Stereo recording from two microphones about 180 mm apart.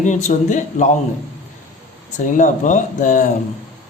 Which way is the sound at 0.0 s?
40° left (ahead or behind).